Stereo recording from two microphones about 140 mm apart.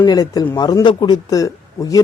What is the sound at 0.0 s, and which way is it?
A man's voice, 30° left (ahead or behind).